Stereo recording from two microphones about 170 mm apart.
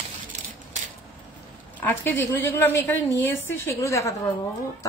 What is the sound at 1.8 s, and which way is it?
A woman's voice, 10° left (ahead or behind).